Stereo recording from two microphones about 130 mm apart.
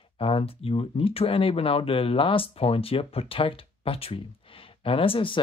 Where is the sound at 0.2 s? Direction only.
45° left (ahead or behind).